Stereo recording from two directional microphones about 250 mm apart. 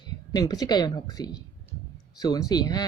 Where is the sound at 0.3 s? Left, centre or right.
Centre.